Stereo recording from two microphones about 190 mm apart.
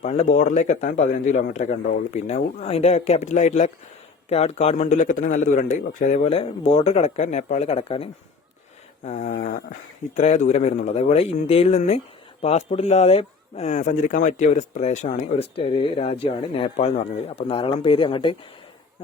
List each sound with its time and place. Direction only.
0.0 s speech: 35° left (ahead or behind)
9.0 s a sound: 40° left (ahead or behind)
10.2 s speech: 40° left (ahead or behind)